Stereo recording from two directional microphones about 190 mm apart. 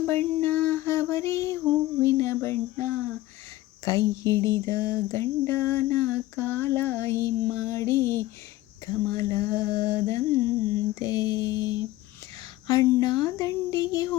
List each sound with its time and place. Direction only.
0.0 s a sound: 10° left (ahead or behind)
11.0 s mantra: 20° left (ahead or behind)
12.6 s speech: 15° left (ahead or behind)